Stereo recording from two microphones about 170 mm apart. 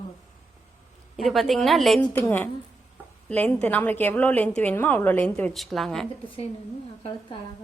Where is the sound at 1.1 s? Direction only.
Centre (ahead or behind).